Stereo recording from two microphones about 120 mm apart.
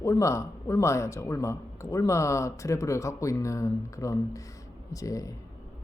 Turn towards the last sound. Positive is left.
turn(degrees=30)  # may be behind; listen again after turning